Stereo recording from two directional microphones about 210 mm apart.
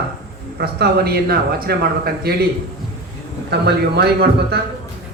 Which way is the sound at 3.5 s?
50° right (ahead or behind).